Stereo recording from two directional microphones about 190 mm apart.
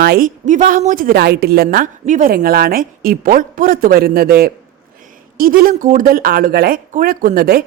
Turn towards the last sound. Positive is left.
turn(degrees=-55)  # may be behind; listen again after turning